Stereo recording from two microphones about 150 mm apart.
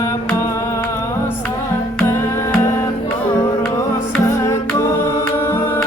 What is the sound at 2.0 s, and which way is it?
Music, 15° left (ahead or behind).